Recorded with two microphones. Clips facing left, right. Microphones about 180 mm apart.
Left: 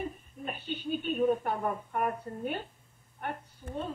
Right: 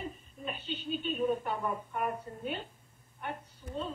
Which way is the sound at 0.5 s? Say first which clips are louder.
Left 2 dB; 60° left (ahead or behind).